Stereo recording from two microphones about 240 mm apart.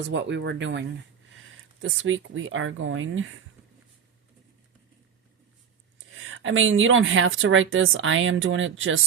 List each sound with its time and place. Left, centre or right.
0.0 s speech: right
6.1 s a woman's voice: right